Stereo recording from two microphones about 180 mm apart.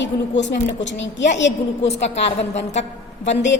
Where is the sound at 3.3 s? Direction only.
80° left.